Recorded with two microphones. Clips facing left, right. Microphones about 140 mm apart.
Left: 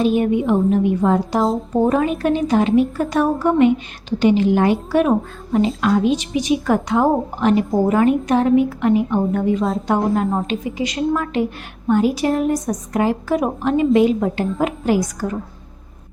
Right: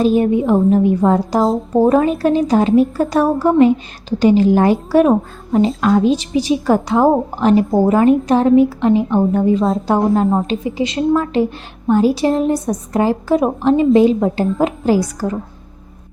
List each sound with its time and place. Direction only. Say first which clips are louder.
0.0 s a woman's voice: right 3 dB; 35° right (ahead or behind)